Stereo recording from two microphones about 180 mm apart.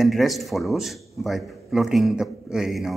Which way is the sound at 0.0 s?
Centre (ahead or behind).